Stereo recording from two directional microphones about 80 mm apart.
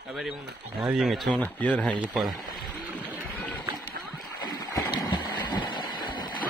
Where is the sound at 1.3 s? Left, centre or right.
Centre.